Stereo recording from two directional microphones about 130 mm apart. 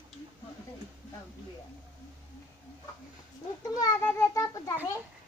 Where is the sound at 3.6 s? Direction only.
30° left (ahead or behind).